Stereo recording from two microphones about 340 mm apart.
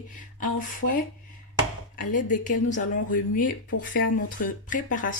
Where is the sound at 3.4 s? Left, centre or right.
Left.